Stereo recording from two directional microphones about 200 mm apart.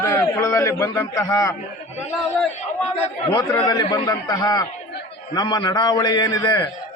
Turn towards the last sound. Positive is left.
turn(degrees=20)  # may be behind; listen again after turning